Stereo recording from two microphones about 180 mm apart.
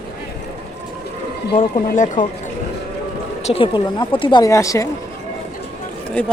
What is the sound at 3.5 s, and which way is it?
Speech, 30° left (ahead or behind).